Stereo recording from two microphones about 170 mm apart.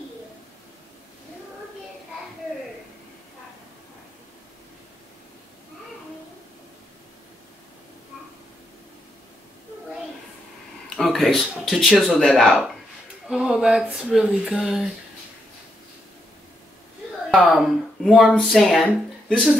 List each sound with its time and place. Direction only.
11.0 s speech: centre (ahead or behind)
17.5 s speech: 5° right (ahead or behind)